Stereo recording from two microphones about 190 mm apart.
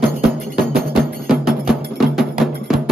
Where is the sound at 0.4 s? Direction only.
Centre (ahead or behind).